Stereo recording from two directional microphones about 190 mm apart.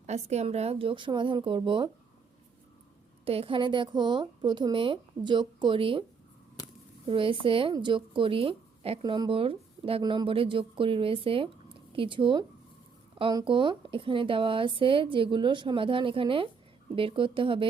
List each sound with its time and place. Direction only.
0.0 s a woman's voice: 35° right (ahead or behind)
3.2 s a woman's voice: 30° right (ahead or behind)
7.1 s a woman's voice: 30° right (ahead or behind)